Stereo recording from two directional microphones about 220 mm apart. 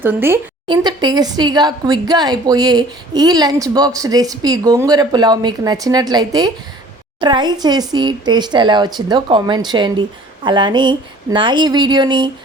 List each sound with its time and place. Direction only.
0.0 s speech: 10° right (ahead or behind)